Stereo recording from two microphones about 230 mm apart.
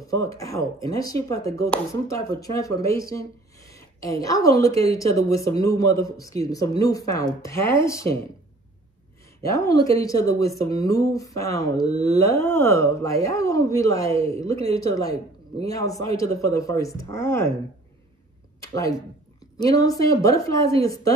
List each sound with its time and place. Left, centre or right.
0.0 s speech: centre
9.4 s speech: centre
18.6 s a woman's voice: centre